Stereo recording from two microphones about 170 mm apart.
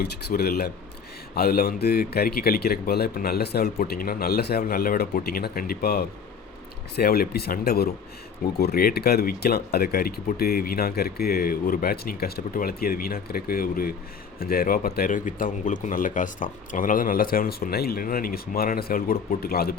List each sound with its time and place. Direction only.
0.0 s speech: 70° left (ahead or behind)